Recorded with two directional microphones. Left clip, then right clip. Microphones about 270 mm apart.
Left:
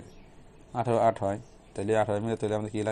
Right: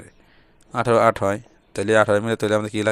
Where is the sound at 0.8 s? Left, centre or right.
Right.